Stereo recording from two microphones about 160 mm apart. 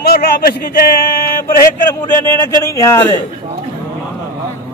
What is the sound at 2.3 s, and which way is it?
Speech, 20° left (ahead or behind).